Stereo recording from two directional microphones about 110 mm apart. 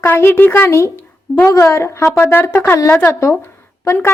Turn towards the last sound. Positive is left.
turn(degrees=25)  # may be behind; listen again after turning